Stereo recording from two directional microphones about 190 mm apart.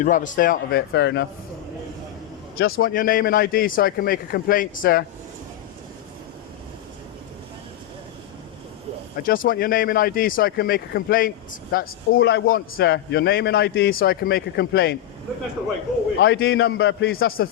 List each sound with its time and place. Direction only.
0.0 s speech: 45° left (ahead or behind); by 1.3 s 65° left (ahead or behind)
2.6 s speech: 55° left (ahead or behind)
9.2 s a man's voice: 50° left (ahead or behind)
16.2 s a man's voice: 60° left (ahead or behind)